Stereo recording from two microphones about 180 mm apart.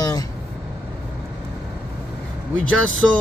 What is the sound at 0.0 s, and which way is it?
Vehicle, 20° left (ahead or behind).